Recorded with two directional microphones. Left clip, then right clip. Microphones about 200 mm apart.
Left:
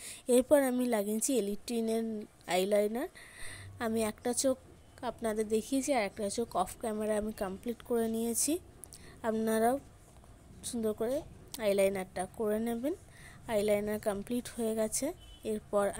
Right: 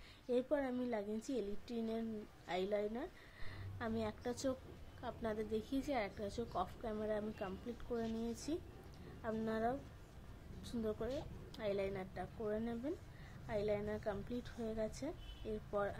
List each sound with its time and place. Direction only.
0.0 s a woman's voice: 50° left (ahead or behind)
10.6 s a woman's voice: 35° left (ahead or behind)